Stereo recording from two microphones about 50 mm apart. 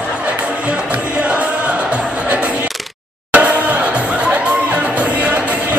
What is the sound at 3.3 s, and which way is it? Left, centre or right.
Chatter, right.